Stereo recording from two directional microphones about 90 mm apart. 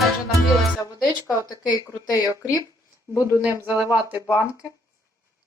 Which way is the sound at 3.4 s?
15° right (ahead or behind).